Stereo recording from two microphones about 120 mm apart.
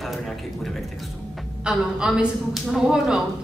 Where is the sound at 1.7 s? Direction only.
5° right (ahead or behind).